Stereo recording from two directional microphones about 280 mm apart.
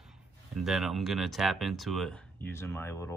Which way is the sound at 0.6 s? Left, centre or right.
Centre.